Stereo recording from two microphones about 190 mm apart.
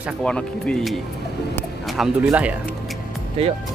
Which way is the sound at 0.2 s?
5° left (ahead or behind).